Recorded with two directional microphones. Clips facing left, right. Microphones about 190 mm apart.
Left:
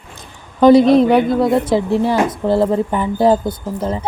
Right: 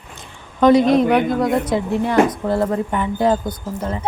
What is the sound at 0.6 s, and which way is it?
A child's voice, 30° left (ahead or behind).